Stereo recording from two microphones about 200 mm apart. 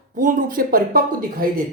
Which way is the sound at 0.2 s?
45° right (ahead or behind).